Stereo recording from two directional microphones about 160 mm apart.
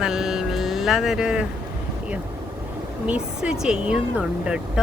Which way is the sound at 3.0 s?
5° right (ahead or behind).